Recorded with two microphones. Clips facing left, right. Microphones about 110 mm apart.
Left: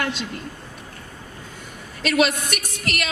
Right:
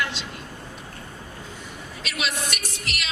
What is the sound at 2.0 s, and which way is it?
A woman's voice, 50° left (ahead or behind).